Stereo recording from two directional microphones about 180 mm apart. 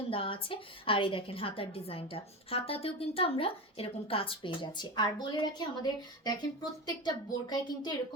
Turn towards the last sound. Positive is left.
turn(degrees=25)  # may be behind; listen again after turning